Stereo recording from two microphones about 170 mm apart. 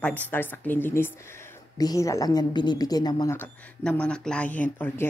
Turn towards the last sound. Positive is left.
turn(degrees=10)  # may be behind; listen again after turning